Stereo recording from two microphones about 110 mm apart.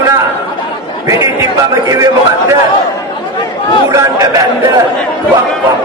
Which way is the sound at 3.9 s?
30° right (ahead or behind).